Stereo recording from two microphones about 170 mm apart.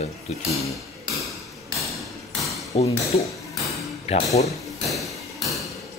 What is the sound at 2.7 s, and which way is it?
Speech, 40° left (ahead or behind).